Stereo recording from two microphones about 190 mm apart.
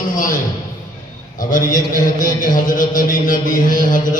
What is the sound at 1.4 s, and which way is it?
A man's voice, 45° left (ahead or behind).